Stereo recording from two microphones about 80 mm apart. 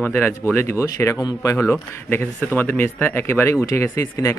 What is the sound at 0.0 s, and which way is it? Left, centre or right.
Speech, left.